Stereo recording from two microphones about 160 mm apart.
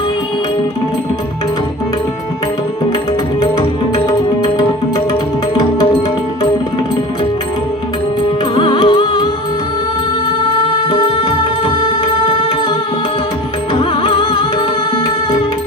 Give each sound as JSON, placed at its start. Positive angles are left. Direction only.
{"t": 3.4, "sound": "music", "side_deg": 25}
{"t": 8.5, "sound": "music", "side_deg": 30}
{"t": 10.8, "sound": "music", "side_deg": 30}
{"t": 13.7, "sound": "music", "side_deg": 35}